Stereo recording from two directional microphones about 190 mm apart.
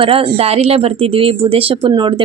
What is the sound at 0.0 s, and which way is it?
Speech, 30° right (ahead or behind).